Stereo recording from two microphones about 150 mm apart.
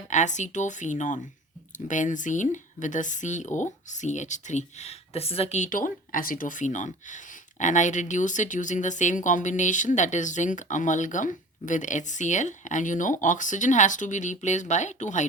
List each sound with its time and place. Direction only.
0.1 s speech: 55° left (ahead or behind)